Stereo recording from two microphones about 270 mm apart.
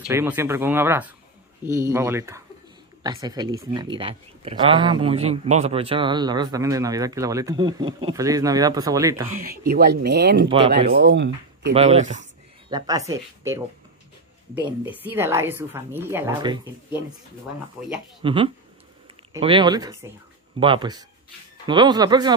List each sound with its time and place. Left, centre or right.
0.1 s speech: centre
9.3 s speech: right
11.7 s speech: right
12.6 s speech: centre
14.9 s speech: centre
18.2 s speech: centre